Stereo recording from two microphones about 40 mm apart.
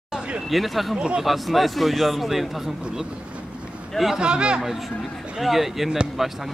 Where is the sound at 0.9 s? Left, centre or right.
Right.